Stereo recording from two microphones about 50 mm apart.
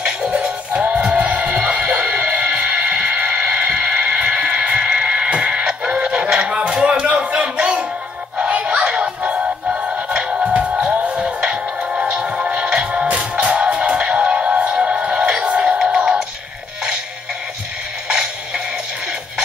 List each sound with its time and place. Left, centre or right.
0.0 s music: right
18.0 s music: centre